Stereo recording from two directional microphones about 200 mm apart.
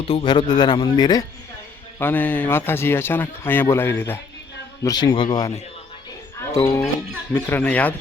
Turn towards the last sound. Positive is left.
turn(degrees=5)  # may be behind; listen again after turning